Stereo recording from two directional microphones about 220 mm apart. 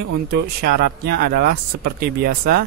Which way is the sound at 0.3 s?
45° right (ahead or behind).